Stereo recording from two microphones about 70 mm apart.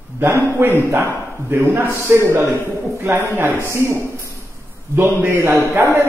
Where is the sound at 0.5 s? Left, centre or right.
Right.